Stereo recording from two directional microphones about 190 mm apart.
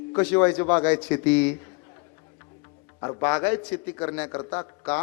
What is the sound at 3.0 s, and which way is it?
A man's voice, 20° left (ahead or behind).